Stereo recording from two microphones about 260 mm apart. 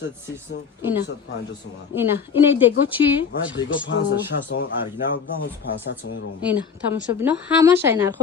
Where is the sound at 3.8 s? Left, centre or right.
Left.